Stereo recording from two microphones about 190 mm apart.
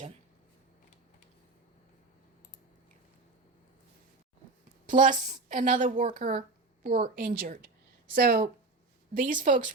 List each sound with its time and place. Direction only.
4.9 s a woman's voice: 45° right (ahead or behind)